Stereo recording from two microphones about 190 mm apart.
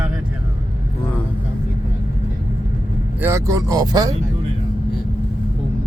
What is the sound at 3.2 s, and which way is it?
Speech, 15° right (ahead or behind).